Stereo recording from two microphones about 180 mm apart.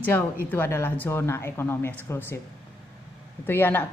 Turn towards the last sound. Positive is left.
turn(degrees=10)  # may be behind; listen again after turning